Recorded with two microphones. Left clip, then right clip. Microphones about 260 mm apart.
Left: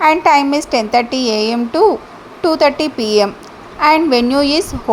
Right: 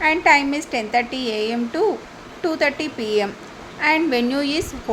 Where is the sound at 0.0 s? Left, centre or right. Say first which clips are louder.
Left 5 dB; centre.